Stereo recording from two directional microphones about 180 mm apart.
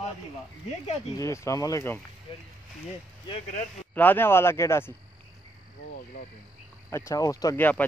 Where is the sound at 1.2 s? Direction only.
15° left (ahead or behind).